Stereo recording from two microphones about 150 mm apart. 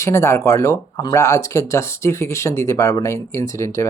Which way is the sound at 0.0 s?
20° left (ahead or behind).